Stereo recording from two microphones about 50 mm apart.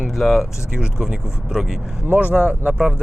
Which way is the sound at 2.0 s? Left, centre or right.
Right.